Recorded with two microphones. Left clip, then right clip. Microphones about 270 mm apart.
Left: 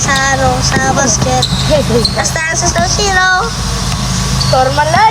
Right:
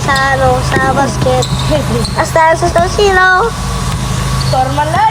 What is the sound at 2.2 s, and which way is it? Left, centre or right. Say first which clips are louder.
Speech: right 5 dB; centre.